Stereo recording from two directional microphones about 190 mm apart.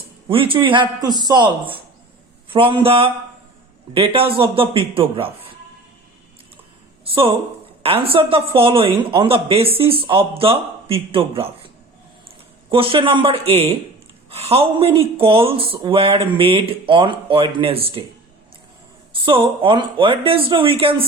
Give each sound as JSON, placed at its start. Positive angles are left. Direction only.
{"t": 0.3, "sound": "speech", "side_deg": -25}
{"t": 7.0, "sound": "speech", "side_deg": -30}
{"t": 12.7, "sound": "speech", "side_deg": -30}
{"t": 19.1, "sound": "speech", "side_deg": -25}